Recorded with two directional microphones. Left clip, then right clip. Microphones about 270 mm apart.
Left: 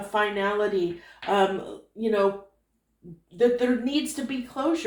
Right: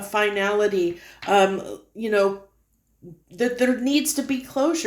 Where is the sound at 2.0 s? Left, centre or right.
Right.